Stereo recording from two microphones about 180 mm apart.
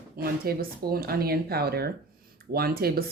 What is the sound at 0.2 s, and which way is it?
Speech, 55° right (ahead or behind).